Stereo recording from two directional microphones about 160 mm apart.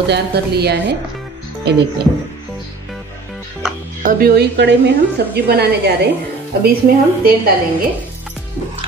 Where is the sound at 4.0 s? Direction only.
65° right (ahead or behind); by 6.1 s 90° right.